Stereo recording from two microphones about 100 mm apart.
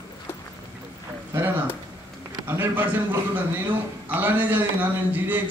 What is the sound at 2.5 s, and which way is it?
A man's voice, 20° right (ahead or behind).